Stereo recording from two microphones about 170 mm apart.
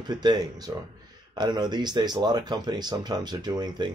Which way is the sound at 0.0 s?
25° right (ahead or behind).